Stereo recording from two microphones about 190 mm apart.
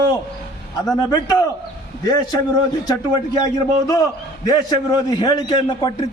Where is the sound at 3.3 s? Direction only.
20° left (ahead or behind).